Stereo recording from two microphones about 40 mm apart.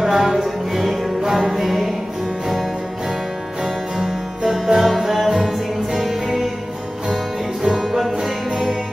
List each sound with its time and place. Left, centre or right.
0.0 s music: centre
0.4 s music: centre
4.4 s music: centre
4.8 s music: centre
7.6 s music: centre